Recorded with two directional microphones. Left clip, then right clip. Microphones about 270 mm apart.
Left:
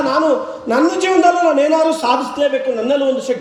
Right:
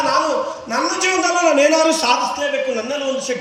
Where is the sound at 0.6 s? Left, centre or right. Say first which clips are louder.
Left 6 dB; left.